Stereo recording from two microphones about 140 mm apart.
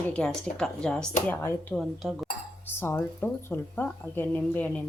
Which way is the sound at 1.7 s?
Centre (ahead or behind).